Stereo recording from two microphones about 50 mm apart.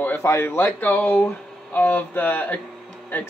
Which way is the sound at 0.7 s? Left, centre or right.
Left.